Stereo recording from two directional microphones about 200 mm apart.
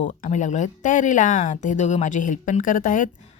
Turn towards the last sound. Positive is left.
turn(degrees=40)  # may be behind; listen again after turning